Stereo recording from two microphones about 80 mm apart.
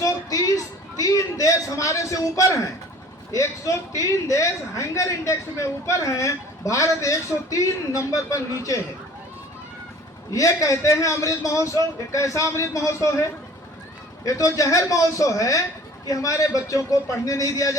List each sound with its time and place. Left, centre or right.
0.0 s a sound: left
3.3 s a man's voice: left
10.3 s a man's voice: left
14.3 s a man's voice: left